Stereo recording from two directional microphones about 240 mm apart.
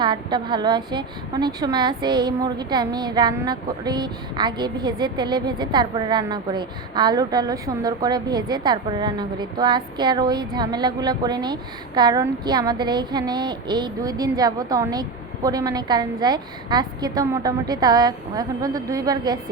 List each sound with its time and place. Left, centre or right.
0.0 s a woman's voice: centre